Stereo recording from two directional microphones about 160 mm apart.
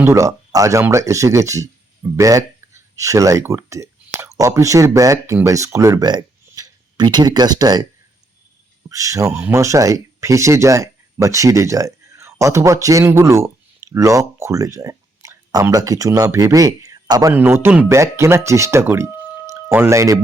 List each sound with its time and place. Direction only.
0.0 s speech: 20° right (ahead or behind)
8.9 s speech: 20° right (ahead or behind)